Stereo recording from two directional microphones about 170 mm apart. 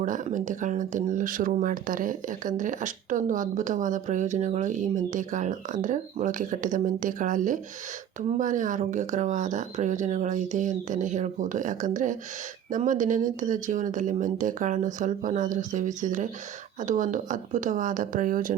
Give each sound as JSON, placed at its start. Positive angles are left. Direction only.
{"t": 0.0, "sound": "speech", "side_deg": -50}